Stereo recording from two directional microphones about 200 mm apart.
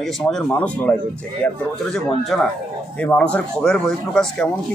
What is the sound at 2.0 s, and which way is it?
A man's voice, centre (ahead or behind).